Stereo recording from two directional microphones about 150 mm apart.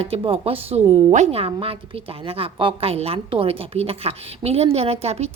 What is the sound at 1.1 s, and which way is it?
Speech, 50° right (ahead or behind).